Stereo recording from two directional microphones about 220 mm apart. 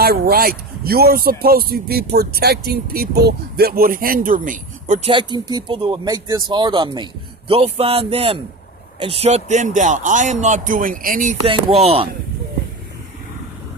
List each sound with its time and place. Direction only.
0.0 s a man's voice: 45° right (ahead or behind)
5.1 s speech: 20° right (ahead or behind); by 11.3 s 40° right (ahead or behind)
11.4 s speech: 25° right (ahead or behind)